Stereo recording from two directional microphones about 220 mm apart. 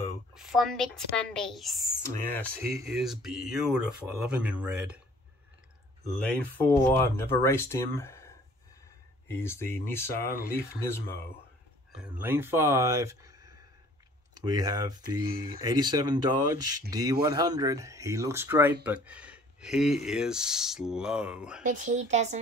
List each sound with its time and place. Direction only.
0.3 s speech: centre (ahead or behind)
6.6 s speech: 10° left (ahead or behind)
9.3 s speech: 10° left (ahead or behind)
11.9 s speech: 5° right (ahead or behind)
21.6 s speech: 35° right (ahead or behind)